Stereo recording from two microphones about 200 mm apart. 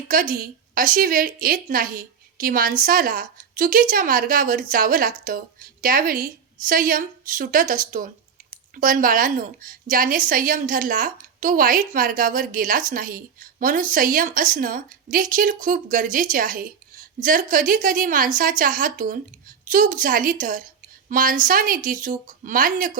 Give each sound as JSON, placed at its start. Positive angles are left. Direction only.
{"t": 0.1, "sound": "a woman's voice", "side_deg": -45}